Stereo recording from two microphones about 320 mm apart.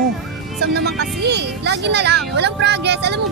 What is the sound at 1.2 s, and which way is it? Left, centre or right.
Speech, right.